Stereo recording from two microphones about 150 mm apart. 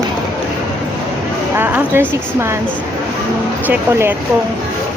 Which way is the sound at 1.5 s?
10° right (ahead or behind).